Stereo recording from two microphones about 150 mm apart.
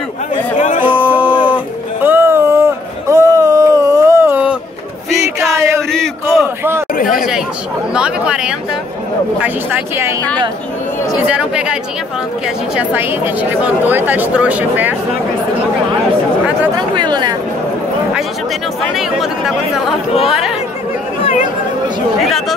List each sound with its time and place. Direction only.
0.8 s a sound: 10° right (ahead or behind)
7.2 s chatter: 5° right (ahead or behind)
7.9 s speech: 5° right (ahead or behind)
11.2 s speech: 5° right (ahead or behind)
16.7 s speech: 30° right (ahead or behind)
18.8 s speech: centre (ahead or behind)
21.2 s chatter: 50° left (ahead or behind)